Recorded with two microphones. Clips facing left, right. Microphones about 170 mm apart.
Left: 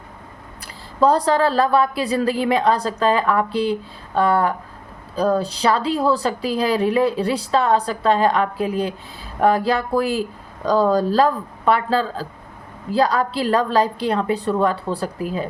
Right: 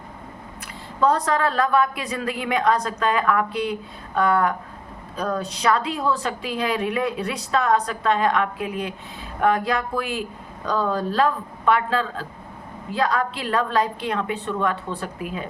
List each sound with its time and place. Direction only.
0.9 s a woman's voice: 35° left (ahead or behind)